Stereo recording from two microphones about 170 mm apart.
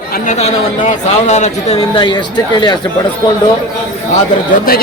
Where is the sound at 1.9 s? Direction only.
25° left (ahead or behind).